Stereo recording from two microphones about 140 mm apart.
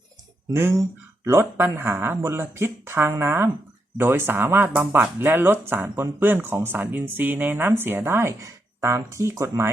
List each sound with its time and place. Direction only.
0.5 s speech: 20° right (ahead or behind)